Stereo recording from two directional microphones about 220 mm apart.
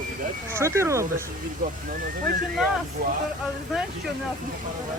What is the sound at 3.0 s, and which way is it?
Speech, 40° right (ahead or behind).